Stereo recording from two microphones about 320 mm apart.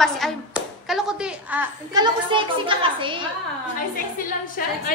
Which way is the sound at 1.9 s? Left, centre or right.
Centre.